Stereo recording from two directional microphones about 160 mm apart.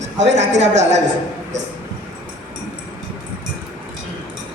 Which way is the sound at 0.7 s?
45° right (ahead or behind).